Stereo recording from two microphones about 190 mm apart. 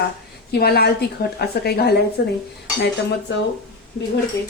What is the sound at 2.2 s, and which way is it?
Speech, 70° left (ahead or behind).